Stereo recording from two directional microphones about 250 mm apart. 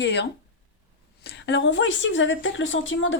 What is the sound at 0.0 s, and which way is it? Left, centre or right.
A woman's voice, left.